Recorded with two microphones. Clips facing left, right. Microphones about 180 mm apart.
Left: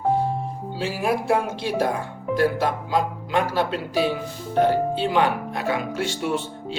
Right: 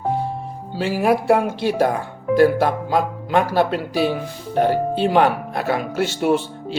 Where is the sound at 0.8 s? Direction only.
60° right (ahead or behind).